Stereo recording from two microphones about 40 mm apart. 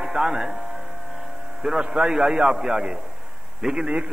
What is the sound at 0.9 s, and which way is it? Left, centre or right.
Vehicle, centre.